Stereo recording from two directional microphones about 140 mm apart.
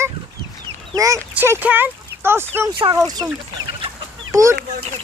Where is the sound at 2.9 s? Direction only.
25° right (ahead or behind).